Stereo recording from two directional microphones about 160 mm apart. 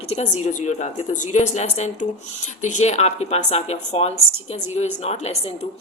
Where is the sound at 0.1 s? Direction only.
45° left (ahead or behind).